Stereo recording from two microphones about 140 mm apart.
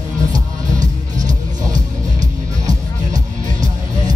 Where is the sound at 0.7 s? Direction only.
65° right (ahead or behind).